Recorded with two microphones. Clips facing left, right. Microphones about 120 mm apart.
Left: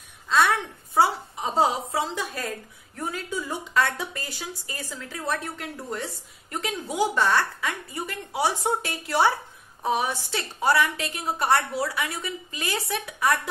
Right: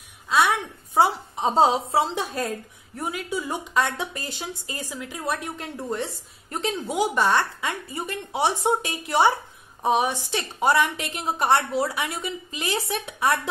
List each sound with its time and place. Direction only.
0.9 s a woman's voice: 20° right (ahead or behind)
3.0 s speech: 10° right (ahead or behind)
5.9 s a woman's voice: 25° right (ahead or behind)